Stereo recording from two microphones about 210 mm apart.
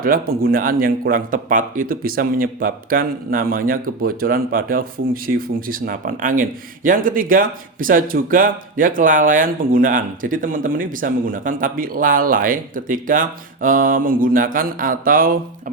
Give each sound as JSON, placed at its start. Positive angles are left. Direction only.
{"t": 0.0, "sound": "speech", "side_deg": -45}